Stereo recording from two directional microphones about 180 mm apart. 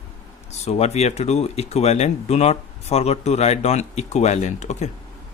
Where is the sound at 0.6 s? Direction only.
35° left (ahead or behind).